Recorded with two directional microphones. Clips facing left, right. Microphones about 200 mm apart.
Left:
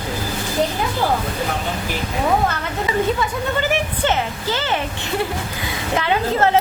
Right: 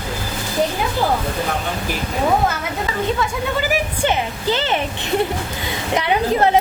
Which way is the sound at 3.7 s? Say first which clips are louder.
Even; 15° right (ahead or behind).